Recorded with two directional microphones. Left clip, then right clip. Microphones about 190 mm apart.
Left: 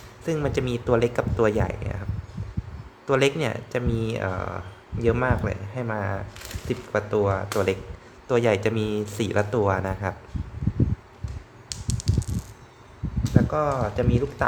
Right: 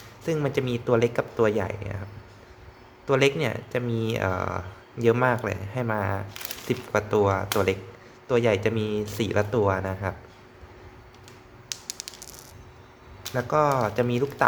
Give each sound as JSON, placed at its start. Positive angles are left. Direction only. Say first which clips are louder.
{"t": 0.3, "sound": "speech", "louder": "even", "side_deg": 0}
{"t": 3.1, "sound": "speech", "louder": "even", "side_deg": 0}
{"t": 11.7, "sound": "a sound", "louder": "left 1 dB", "side_deg": -15}
{"t": 13.3, "sound": "speech", "louder": "right 2 dB", "side_deg": -10}